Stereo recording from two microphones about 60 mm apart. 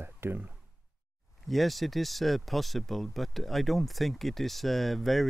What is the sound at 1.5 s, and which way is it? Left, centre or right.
Speech, centre.